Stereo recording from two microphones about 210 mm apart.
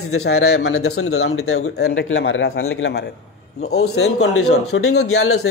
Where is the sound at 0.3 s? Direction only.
65° left (ahead or behind).